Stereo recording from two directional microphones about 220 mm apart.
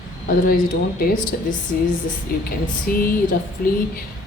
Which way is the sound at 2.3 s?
40° left (ahead or behind).